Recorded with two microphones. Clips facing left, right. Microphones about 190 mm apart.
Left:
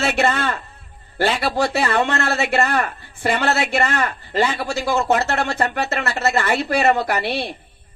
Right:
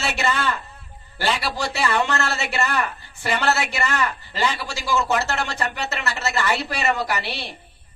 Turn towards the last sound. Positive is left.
turn(degrees=55)  # may be behind; listen again after turning